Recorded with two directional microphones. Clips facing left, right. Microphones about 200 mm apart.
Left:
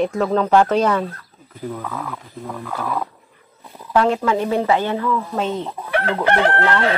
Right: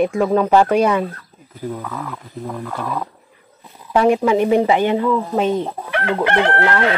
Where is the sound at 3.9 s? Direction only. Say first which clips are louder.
Right 3 dB; 15° right (ahead or behind).